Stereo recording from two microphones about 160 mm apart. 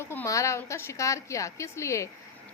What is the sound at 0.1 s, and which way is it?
Speech, 15° left (ahead or behind).